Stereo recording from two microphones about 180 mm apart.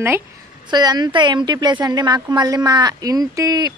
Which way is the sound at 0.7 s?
20° right (ahead or behind).